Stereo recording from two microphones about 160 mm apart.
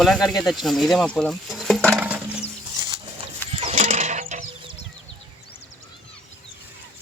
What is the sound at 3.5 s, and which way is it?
Mechanisms, 40° right (ahead or behind).